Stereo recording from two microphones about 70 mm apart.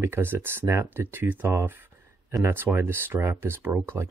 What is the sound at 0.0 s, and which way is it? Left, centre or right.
Speech, right.